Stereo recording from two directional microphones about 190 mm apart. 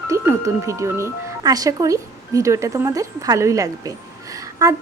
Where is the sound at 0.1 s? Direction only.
15° right (ahead or behind).